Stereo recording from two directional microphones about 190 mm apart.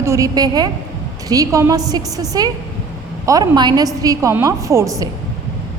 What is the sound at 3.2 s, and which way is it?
A woman's voice, 20° right (ahead or behind).